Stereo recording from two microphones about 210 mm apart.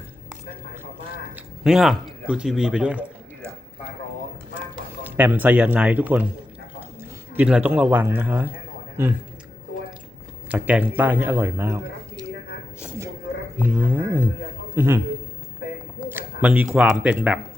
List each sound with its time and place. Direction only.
1.4 s speech: centre (ahead or behind)
5.0 s speech: 5° right (ahead or behind)
7.3 s speech: 5° right (ahead or behind)
10.5 s speech: 5° right (ahead or behind)
13.6 s speech: 10° right (ahead or behind)
16.0 s speech: 10° right (ahead or behind)